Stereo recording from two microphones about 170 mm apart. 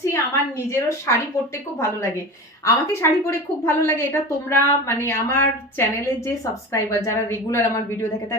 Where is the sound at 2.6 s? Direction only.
15° left (ahead or behind).